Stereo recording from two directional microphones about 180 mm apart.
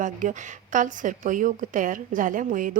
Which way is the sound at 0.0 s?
45° right (ahead or behind).